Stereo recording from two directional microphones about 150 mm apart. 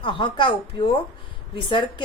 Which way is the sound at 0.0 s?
35° left (ahead or behind).